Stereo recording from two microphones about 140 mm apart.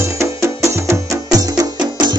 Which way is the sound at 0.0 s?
20° right (ahead or behind).